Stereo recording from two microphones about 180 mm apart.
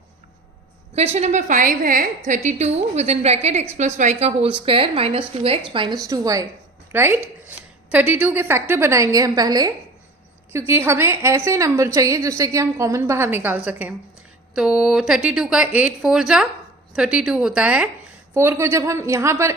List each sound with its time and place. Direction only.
0.9 s a woman's voice: 35° right (ahead or behind); by 19.5 s 15° right (ahead or behind)